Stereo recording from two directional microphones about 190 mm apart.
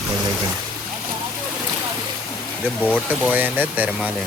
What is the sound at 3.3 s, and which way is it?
Speech, 10° right (ahead or behind).